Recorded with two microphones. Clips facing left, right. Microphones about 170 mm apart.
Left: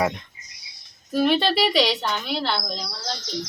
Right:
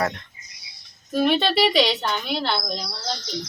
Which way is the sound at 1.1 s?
5° left (ahead or behind).